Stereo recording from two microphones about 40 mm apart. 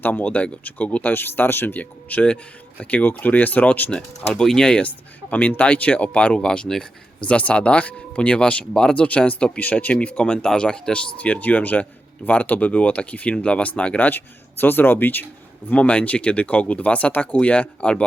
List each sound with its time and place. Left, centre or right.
0.0 s speech: left
0.3 s a man's voice: left
1.1 s speech: left
1.7 s a man's voice: left
4.2 s speech: left
4.8 s a man's voice: left
7.3 s a man's voice: left
8.7 s speech: centre
9.0 s a man's voice: left
14.6 s speech: left
15.7 s a man's voice: left